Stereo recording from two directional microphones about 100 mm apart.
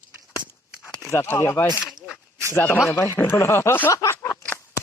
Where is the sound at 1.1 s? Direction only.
25° left (ahead or behind).